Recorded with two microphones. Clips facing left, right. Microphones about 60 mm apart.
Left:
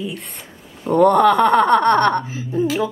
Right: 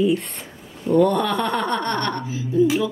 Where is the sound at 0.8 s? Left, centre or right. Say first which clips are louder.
Left 5 dB; left.